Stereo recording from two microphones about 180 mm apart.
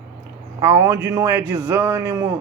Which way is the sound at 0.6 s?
15° right (ahead or behind).